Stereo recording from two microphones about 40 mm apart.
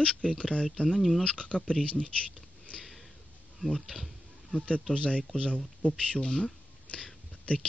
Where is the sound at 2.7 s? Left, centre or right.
Left.